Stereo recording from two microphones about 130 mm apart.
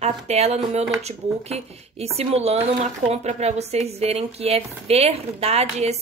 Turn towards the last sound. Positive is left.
turn(degrees=-55)  # may be behind; listen again after turning